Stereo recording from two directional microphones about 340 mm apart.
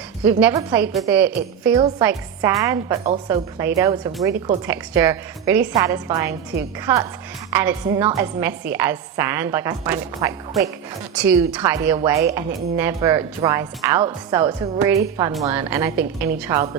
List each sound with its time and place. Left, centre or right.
0.3 s a woman's voice: centre